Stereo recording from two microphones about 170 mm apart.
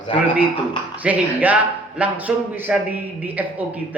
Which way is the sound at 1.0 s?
10° right (ahead or behind).